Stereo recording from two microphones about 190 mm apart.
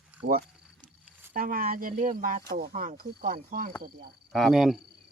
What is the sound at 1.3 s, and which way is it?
Speech, 50° right (ahead or behind).